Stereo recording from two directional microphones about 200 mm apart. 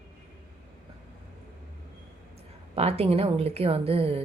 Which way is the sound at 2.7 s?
30° right (ahead or behind).